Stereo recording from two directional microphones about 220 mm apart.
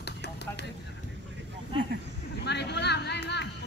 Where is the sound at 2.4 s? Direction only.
50° left (ahead or behind).